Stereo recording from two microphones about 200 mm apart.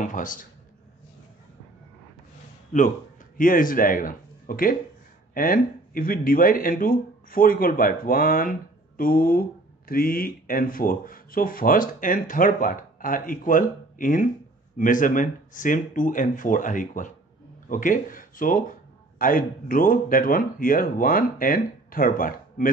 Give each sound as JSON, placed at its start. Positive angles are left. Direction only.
{"t": 0.0, "sound": "a man's voice", "side_deg": 40}
{"t": 2.7, "sound": "speech", "side_deg": 40}